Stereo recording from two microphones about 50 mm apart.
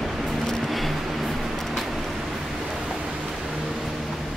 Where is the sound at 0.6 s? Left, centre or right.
Centre.